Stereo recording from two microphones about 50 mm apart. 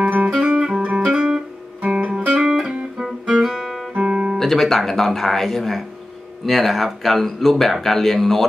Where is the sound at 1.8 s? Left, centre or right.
Right.